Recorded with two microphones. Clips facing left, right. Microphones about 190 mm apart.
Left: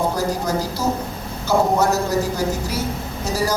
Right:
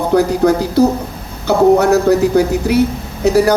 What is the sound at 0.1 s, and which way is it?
Speech, 65° right (ahead or behind).